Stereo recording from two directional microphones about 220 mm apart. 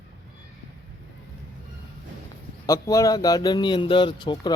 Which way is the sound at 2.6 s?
15° left (ahead or behind).